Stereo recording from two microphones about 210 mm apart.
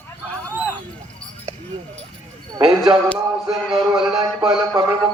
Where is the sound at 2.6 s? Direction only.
Centre (ahead or behind).